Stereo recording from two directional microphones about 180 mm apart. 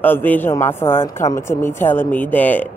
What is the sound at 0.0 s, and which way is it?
Mantra, 10° left (ahead or behind).